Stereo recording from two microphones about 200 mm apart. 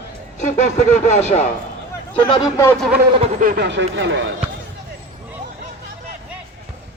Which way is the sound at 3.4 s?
45° right (ahead or behind).